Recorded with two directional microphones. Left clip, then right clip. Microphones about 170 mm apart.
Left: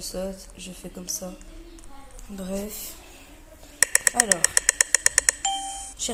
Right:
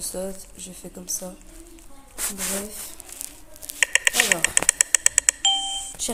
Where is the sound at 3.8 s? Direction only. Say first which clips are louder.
Right 3 dB; 35° left (ahead or behind).